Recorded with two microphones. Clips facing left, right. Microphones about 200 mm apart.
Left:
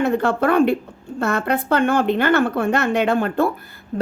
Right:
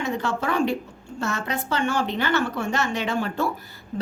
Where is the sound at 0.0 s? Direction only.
55° left (ahead or behind).